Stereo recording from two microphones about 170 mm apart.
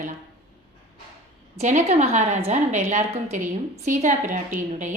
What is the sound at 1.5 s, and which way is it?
A woman's voice, 40° right (ahead or behind).